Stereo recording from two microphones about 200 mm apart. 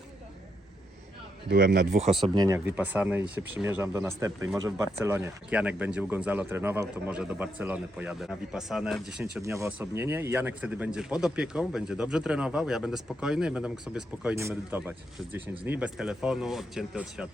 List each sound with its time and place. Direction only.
1.5 s a man's voice: 45° right (ahead or behind); by 2.6 s 20° right (ahead or behind)
2.6 s speech: 10° right (ahead or behind)
9.4 s a man's voice: 15° right (ahead or behind)